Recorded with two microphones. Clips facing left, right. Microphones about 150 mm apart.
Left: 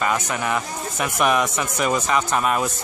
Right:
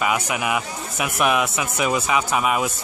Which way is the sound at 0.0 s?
10° right (ahead or behind).